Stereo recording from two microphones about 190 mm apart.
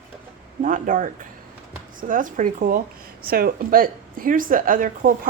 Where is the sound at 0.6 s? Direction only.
45° right (ahead or behind).